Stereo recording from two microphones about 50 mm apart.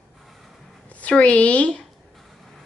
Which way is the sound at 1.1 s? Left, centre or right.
Left.